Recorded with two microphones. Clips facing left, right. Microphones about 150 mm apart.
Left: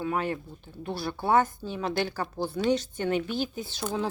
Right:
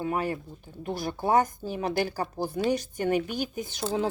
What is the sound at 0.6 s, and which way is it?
A woman's voice, 15° right (ahead or behind).